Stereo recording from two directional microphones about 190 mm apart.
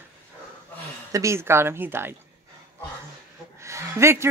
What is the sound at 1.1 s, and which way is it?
Speech, 15° right (ahead or behind).